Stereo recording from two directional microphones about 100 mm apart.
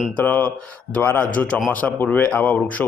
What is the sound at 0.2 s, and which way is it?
A man's voice, 15° left (ahead or behind).